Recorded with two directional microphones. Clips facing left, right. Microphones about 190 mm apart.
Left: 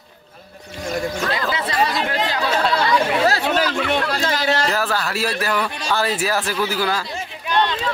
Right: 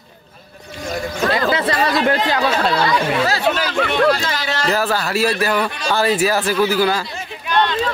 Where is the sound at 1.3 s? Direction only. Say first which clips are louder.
Right 5 dB; 60° right (ahead or behind).